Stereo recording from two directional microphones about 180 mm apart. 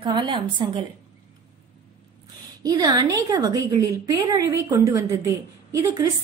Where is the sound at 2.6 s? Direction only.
20° right (ahead or behind).